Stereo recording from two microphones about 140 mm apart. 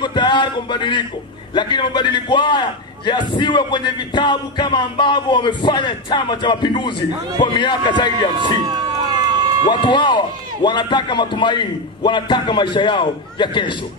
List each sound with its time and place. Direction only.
0.0 s a man's voice: 35° left (ahead or behind)
8.5 s a sound: 30° right (ahead or behind)
9.7 s a man's voice: 35° left (ahead or behind)